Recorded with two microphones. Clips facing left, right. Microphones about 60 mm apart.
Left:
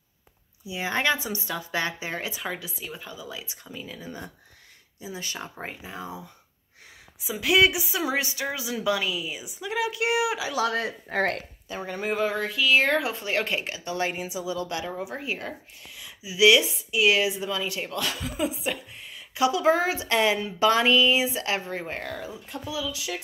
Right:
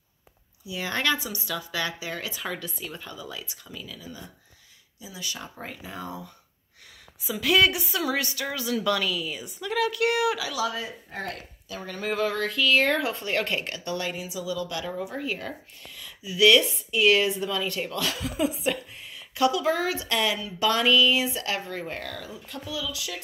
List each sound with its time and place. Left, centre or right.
0.7 s speech: left
2.4 s a woman's voice: centre
3.4 s speech: left
5.8 s a woman's voice: centre
7.2 s a woman's voice: centre
10.6 s speech: left
11.7 s a woman's voice: centre
13.9 s a woman's voice: left; by 19.2 s centre
19.3 s a woman's voice: centre
19.6 s speech: left